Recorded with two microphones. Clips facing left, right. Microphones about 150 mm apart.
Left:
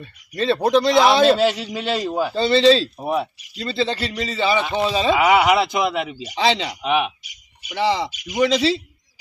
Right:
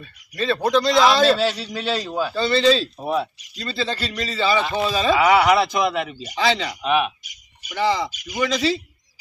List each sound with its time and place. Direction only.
0.0 s a man's voice: 25° left (ahead or behind)
3.0 s a man's voice: 10° left (ahead or behind)
3.6 s a man's voice: 25° left (ahead or behind)
6.4 s a man's voice: 25° left (ahead or behind)